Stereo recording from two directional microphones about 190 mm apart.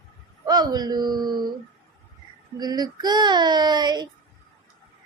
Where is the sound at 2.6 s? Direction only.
20° right (ahead or behind).